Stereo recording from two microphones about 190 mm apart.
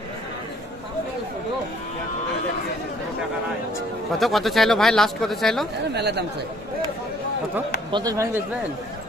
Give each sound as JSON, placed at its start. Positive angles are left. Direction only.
{"t": 4.2, "sound": "speech", "side_deg": 0}
{"t": 5.9, "sound": "speech", "side_deg": -60}
{"t": 7.9, "sound": "speech", "side_deg": -20}